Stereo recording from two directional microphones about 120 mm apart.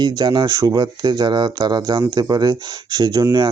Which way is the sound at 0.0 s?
40° right (ahead or behind).